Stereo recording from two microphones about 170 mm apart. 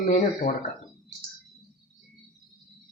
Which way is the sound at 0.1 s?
50° left (ahead or behind).